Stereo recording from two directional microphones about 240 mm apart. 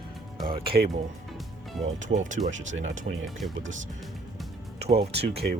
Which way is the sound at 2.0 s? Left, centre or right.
Right.